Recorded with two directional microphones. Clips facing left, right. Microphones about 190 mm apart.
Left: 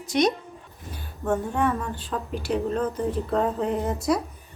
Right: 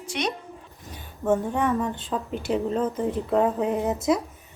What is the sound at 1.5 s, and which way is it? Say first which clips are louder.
A woman's voice: right 1 dB; 20° right (ahead or behind).